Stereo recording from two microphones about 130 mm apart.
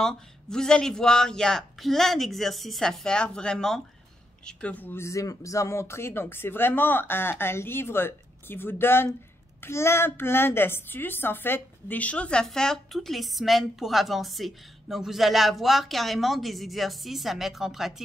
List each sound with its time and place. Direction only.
0.0 s a woman's voice: 5° left (ahead or behind)